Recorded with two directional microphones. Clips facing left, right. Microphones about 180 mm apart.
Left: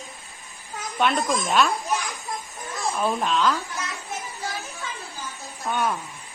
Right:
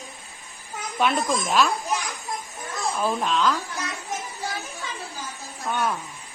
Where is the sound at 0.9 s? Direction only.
Centre (ahead or behind).